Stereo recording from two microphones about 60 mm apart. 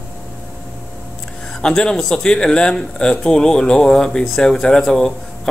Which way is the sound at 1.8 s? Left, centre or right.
Centre.